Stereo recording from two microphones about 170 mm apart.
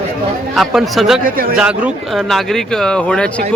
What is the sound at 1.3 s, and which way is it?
Speech, 60° right (ahead or behind).